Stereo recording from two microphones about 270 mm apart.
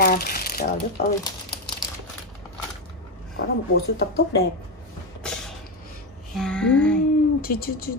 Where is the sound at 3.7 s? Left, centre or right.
Left.